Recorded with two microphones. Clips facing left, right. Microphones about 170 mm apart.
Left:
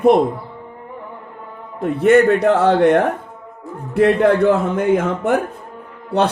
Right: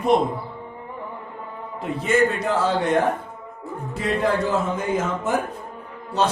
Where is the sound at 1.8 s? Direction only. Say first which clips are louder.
Left 8 dB; 60° left (ahead or behind).